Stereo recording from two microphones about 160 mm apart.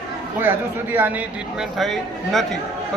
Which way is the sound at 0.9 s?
10° right (ahead or behind).